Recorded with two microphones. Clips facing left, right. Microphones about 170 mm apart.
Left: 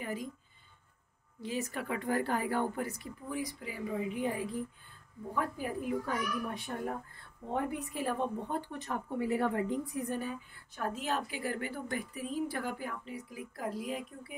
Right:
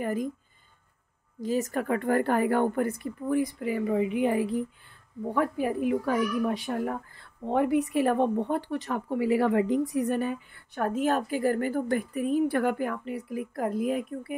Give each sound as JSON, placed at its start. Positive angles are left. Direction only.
{"t": 0.0, "sound": "speech", "side_deg": -50}
{"t": 1.4, "sound": "a woman's voice", "side_deg": -45}
{"t": 11.9, "sound": "a woman's voice", "side_deg": -60}